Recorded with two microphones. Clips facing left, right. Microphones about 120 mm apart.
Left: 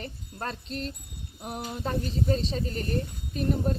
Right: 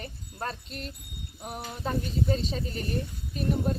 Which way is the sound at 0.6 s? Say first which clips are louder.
Left 5 dB; 35° left (ahead or behind).